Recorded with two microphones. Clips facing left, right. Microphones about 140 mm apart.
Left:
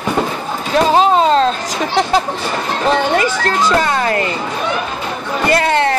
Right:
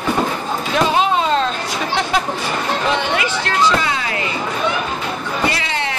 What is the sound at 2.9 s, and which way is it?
Speech, 45° left (ahead or behind).